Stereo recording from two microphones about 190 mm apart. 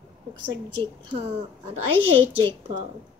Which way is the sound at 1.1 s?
30° right (ahead or behind).